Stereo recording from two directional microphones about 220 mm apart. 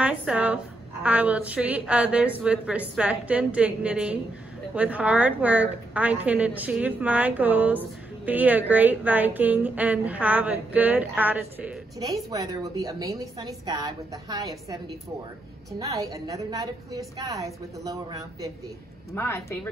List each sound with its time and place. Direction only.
0.0 s a sound: 5° right (ahead or behind)
1.0 s a woman's voice: 5° right (ahead or behind)
15.8 s a woman's voice: 15° right (ahead or behind)
19.1 s speech: 10° left (ahead or behind)